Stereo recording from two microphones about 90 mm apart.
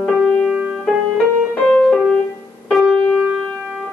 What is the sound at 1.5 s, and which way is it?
Music, 15° left (ahead or behind).